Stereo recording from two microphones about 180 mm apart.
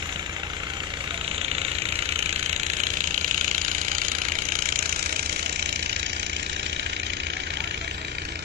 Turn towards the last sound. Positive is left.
turn(degrees=-75)  # may be behind; listen again after turning